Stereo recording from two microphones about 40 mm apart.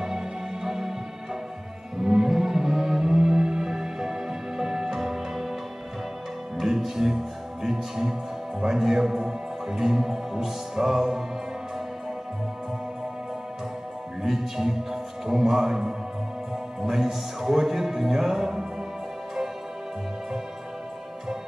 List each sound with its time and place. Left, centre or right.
0.7 s music: centre
2.0 s music: centre
6.6 s music: centre
7.6 s speech: centre
14.2 s speech: centre